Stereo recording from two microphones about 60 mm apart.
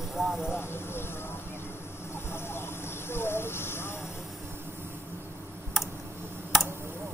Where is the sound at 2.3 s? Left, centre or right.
Left.